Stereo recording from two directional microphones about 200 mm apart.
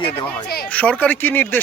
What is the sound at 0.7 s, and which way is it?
Speech, 5° left (ahead or behind).